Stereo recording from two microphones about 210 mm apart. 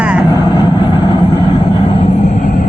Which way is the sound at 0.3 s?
20° left (ahead or behind).